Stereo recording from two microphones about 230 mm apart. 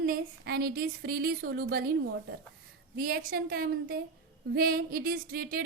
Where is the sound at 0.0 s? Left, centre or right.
Right.